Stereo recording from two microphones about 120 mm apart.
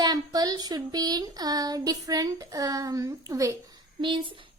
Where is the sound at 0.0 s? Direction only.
35° right (ahead or behind).